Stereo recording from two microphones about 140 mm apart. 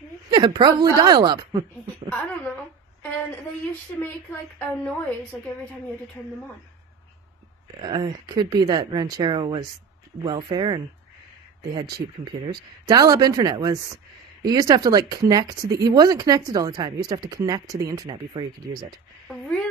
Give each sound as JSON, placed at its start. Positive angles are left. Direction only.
{"t": 0.3, "sound": "a woman's voice", "side_deg": -30}
{"t": 2.0, "sound": "a woman's voice", "side_deg": 10}
{"t": 7.8, "sound": "speech", "side_deg": -30}
{"t": 19.2, "sound": "speech", "side_deg": 5}